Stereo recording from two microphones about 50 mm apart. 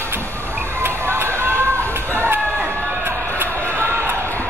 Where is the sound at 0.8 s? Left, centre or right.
Right.